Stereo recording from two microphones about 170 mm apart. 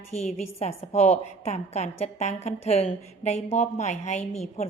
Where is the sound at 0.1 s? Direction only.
40° left (ahead or behind).